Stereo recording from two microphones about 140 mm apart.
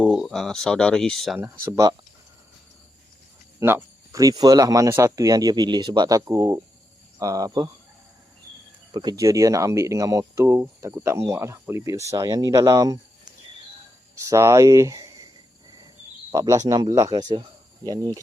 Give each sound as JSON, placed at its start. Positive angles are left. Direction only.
{"t": 0.0, "sound": "speech", "side_deg": 0}
{"t": 3.6, "sound": "speech", "side_deg": -15}
{"t": 8.9, "sound": "speech", "side_deg": -35}
{"t": 14.3, "sound": "speech", "side_deg": -20}
{"t": 16.3, "sound": "speech", "side_deg": -25}